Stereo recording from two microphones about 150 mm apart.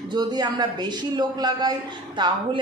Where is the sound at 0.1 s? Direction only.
30° right (ahead or behind).